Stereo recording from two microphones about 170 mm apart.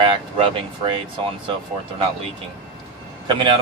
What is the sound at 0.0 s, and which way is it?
Speech, 30° right (ahead or behind).